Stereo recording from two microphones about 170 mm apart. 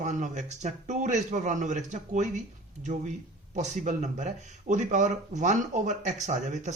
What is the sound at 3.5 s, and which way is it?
Speech, 45° right (ahead or behind).